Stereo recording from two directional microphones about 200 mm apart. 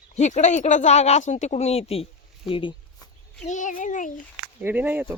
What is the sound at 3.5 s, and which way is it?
Speech, 40° left (ahead or behind).